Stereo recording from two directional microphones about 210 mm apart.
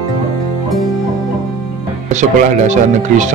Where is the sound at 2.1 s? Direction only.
35° right (ahead or behind).